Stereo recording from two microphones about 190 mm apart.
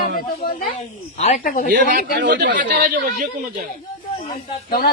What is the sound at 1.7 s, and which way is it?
Speech, 50° right (ahead or behind).